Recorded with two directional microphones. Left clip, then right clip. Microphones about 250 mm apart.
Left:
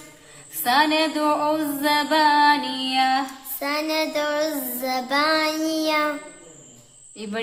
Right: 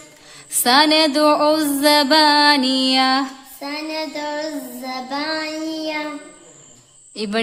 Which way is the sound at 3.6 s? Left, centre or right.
Centre.